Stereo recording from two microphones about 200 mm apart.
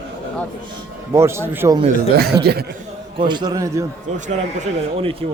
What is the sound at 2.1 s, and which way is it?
Speech, 50° right (ahead or behind).